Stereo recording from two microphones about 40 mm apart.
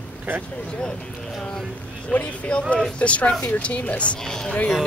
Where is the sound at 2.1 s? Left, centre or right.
Left.